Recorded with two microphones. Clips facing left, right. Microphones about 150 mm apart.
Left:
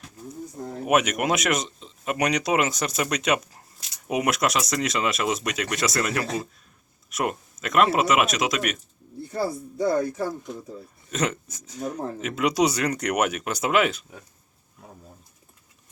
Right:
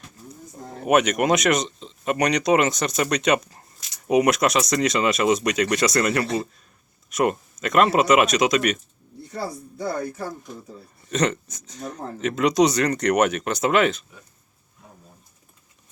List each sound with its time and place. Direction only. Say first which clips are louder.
0.9 s speech: right 4 dB; 5° left (ahead or behind)
9.7 s speech: left 5 dB; 20° left (ahead or behind)
11.1 s speech: right 4 dB; 5° left (ahead or behind)